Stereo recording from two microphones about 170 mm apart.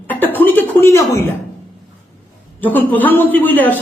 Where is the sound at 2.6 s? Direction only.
10° left (ahead or behind).